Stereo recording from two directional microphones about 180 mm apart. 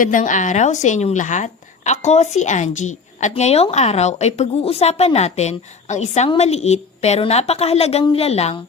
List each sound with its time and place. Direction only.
0.0 s a woman's voice: 45° left (ahead or behind)